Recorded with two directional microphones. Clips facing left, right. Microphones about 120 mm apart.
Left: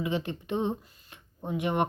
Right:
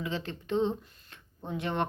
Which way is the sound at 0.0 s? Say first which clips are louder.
Left 4 dB; 15° left (ahead or behind).